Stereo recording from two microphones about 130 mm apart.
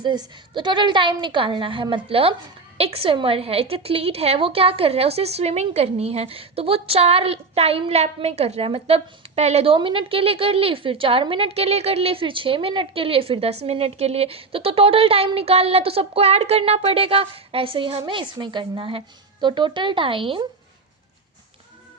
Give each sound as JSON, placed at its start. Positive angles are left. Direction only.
{"t": 0.0, "sound": "a woman's voice", "side_deg": -35}